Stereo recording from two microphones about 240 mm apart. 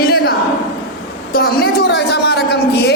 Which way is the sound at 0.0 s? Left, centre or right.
Left.